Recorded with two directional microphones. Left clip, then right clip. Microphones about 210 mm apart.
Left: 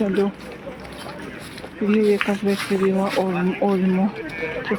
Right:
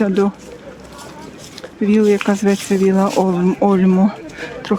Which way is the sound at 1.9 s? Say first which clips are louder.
Right 4 dB; 35° right (ahead or behind).